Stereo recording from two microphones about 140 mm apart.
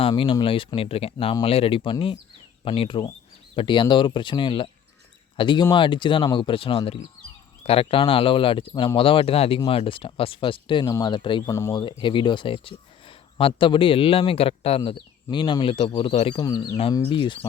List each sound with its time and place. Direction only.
0.0 s speech: 40° left (ahead or behind)
11.4 s speech: 20° left (ahead or behind)